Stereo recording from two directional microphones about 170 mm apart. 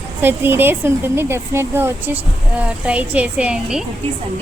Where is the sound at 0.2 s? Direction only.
10° right (ahead or behind).